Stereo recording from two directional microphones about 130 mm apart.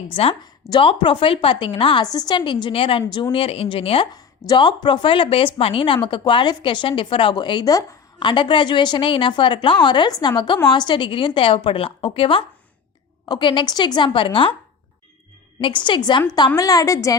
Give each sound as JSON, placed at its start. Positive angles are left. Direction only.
{"t": 0.1, "sound": "a woman's voice", "side_deg": 50}
{"t": 15.6, "sound": "a woman's voice", "side_deg": 40}